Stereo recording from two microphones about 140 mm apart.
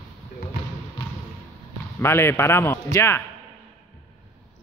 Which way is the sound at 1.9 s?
15° left (ahead or behind).